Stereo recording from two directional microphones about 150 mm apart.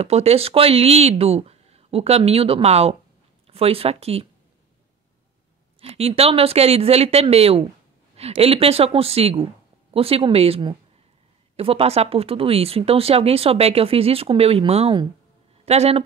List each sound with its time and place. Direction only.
0.0 s speech: 45° right (ahead or behind)
5.8 s speech: 40° right (ahead or behind)